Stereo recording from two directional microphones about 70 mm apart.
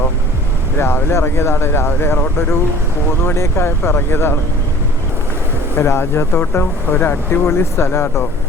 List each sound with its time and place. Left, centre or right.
0.8 s speech: left
5.7 s speech: left